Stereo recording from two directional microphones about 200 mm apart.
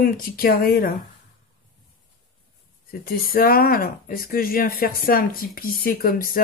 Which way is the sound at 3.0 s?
45° left (ahead or behind).